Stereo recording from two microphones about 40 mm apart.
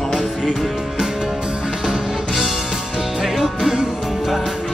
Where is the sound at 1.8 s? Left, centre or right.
Centre.